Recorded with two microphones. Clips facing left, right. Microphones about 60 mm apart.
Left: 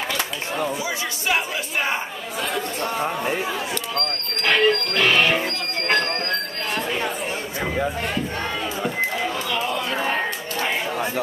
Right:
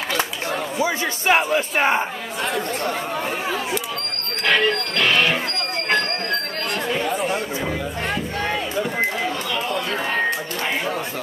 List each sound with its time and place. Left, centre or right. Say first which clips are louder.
0.7 s a man's voice: right 5 dB; right
4.4 s speech: even; centre